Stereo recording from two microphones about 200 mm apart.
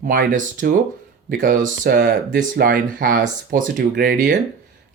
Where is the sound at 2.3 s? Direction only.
50° right (ahead or behind).